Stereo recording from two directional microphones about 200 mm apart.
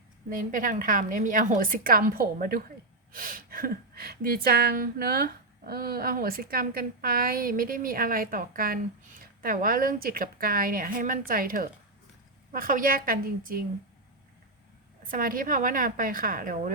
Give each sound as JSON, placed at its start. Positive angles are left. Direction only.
{"t": 0.3, "sound": "speech", "side_deg": -40}
{"t": 15.0, "sound": "speech", "side_deg": -45}